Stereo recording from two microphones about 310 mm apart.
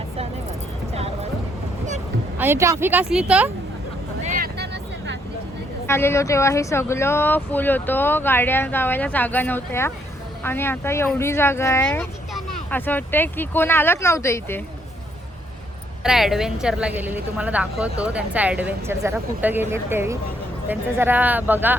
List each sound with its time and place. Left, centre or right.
0.9 s music: centre
2.4 s a woman's voice: centre
4.2 s vehicle: right
5.9 s speech: centre
16.0 s a woman's voice: centre